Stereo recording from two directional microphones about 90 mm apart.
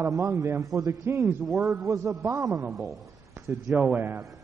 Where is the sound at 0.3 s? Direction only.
30° right (ahead or behind).